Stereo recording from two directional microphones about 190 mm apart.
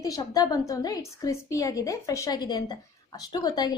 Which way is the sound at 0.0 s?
20° left (ahead or behind).